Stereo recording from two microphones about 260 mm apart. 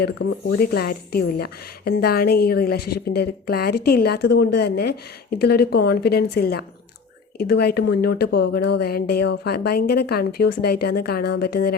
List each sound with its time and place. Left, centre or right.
0.0 s a woman's voice: left